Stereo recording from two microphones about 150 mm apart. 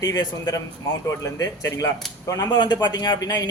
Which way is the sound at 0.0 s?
25° left (ahead or behind).